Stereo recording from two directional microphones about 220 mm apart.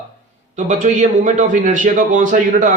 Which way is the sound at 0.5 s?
35° right (ahead or behind).